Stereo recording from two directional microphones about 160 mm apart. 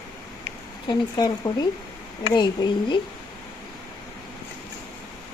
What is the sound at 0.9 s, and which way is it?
Speech, 25° left (ahead or behind).